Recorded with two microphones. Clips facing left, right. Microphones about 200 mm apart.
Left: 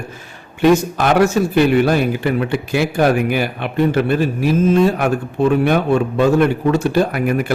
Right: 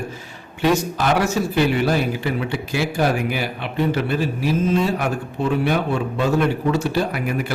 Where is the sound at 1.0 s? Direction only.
55° left (ahead or behind).